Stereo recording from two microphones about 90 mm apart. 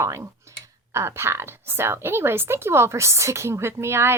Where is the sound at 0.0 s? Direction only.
35° right (ahead or behind).